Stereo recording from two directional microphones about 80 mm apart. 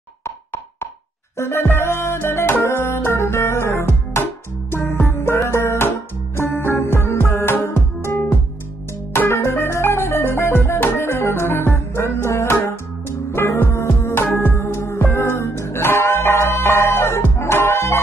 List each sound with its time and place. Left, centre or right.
1.4 s music: left